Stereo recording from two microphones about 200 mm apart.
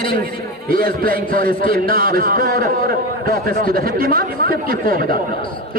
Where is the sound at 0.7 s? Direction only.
45° right (ahead or behind).